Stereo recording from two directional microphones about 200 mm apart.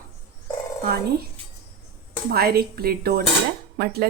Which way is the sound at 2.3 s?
50° right (ahead or behind).